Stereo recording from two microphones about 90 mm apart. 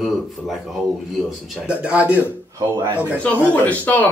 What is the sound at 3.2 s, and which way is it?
Speech, 20° left (ahead or behind).